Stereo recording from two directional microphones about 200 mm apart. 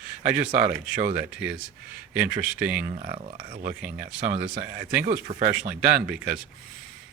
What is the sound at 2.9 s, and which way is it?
Speech, 45° right (ahead or behind).